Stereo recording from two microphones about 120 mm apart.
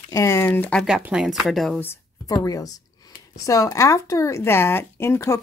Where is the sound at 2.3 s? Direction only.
30° left (ahead or behind).